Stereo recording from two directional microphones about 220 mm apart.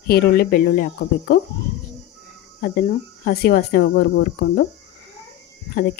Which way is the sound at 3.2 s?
45° left (ahead or behind).